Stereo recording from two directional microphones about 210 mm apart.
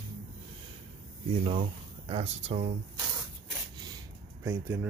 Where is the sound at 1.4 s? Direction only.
25° right (ahead or behind).